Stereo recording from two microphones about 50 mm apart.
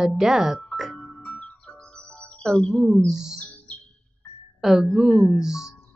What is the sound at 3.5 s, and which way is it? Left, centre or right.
Music, left.